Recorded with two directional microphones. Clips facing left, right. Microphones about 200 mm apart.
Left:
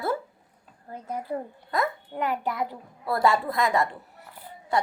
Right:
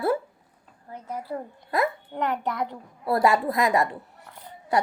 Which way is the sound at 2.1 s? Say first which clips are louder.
Left 2 dB; 5° left (ahead or behind).